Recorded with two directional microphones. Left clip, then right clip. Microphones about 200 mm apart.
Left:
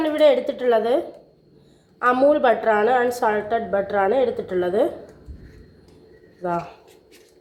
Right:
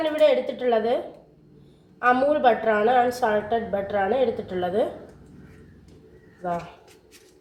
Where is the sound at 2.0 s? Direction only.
40° left (ahead or behind).